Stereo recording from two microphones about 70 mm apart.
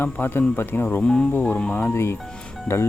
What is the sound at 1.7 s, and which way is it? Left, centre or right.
Speech, left.